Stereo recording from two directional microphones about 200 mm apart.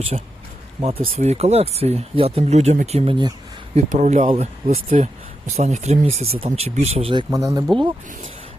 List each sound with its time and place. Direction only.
0.1 s speech: 35° right (ahead or behind)
3.8 s speech: 35° right (ahead or behind)
7.3 s speech: 15° right (ahead or behind)